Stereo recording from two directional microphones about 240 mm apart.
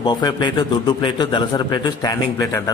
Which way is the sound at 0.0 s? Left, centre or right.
Centre.